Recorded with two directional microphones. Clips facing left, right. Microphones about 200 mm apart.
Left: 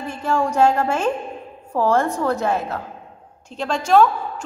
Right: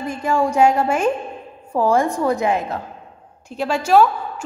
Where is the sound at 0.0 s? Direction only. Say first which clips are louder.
Right 2 dB; 10° right (ahead or behind).